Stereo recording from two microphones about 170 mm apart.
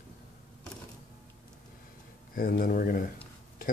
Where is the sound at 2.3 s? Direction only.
60° left (ahead or behind).